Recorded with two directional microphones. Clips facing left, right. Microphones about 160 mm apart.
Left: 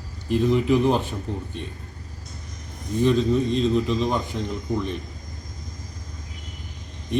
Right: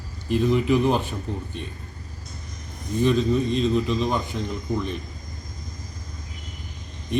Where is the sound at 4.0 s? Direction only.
5° right (ahead or behind).